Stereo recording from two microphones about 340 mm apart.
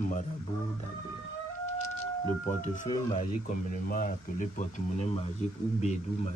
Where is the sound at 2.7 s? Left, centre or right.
Left.